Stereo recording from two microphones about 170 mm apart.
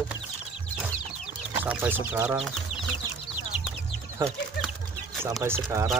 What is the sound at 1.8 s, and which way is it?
Speech, 10° right (ahead or behind).